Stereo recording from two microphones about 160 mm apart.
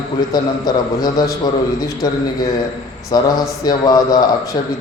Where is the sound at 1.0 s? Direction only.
25° left (ahead or behind).